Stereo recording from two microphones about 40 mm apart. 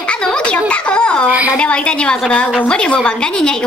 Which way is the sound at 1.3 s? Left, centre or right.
Right.